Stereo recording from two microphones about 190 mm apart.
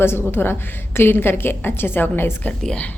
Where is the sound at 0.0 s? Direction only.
10° left (ahead or behind).